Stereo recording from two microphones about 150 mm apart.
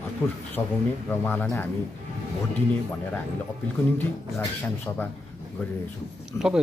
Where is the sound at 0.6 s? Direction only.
15° left (ahead or behind).